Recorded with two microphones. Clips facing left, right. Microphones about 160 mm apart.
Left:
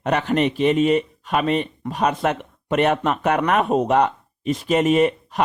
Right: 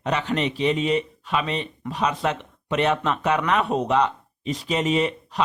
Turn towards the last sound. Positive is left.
turn(degrees=50)  # may be behind; listen again after turning